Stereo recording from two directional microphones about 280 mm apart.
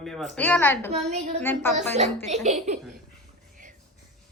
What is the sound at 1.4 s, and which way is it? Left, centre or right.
Speech, centre.